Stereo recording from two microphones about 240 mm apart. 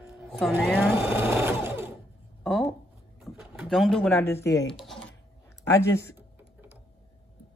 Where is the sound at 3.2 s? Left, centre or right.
Centre.